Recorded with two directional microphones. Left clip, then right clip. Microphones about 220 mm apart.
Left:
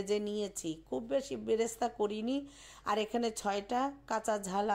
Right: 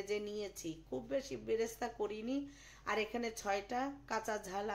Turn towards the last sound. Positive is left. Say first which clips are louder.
# left 7 dB
turn(degrees=30)  # may be behind; listen again after turning